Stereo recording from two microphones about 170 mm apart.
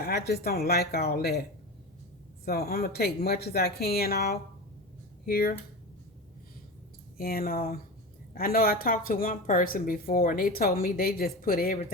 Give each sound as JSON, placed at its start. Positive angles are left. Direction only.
{"t": 0.0, "sound": "speech", "side_deg": 70}
{"t": 7.2, "sound": "speech", "side_deg": 60}